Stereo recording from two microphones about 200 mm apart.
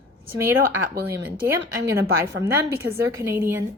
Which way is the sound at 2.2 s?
15° right (ahead or behind).